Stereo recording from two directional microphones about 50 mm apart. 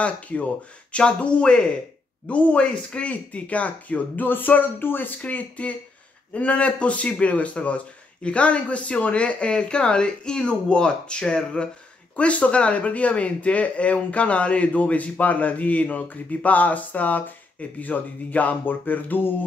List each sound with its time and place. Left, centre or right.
0.0 s speech: left
4.3 s speech: left